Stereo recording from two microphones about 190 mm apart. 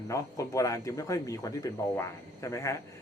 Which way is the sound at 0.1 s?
15° left (ahead or behind).